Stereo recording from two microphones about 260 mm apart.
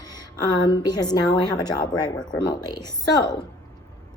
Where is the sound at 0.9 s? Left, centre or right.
Centre.